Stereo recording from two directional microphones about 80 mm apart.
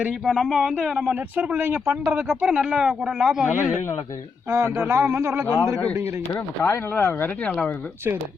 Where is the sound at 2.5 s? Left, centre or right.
Centre.